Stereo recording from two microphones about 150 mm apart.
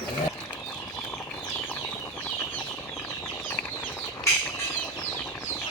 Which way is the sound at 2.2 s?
10° left (ahead or behind).